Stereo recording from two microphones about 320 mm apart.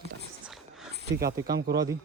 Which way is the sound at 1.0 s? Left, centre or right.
Right.